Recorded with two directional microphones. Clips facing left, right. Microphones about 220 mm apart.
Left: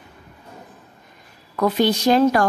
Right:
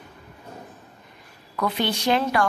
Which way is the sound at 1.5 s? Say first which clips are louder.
Left 7 dB; 40° left (ahead or behind).